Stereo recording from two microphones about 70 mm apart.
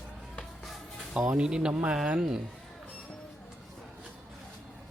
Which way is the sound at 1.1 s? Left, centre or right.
Centre.